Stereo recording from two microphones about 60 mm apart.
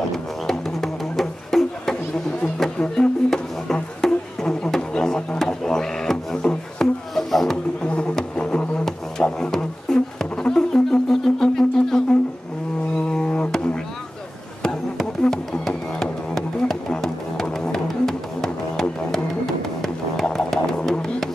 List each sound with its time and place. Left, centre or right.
0.5 s music: centre
2.8 s didgeridoo: centre
7.8 s didgeridoo: centre
12.9 s music: centre
14.6 s music: centre
20.3 s didgeridoo: centre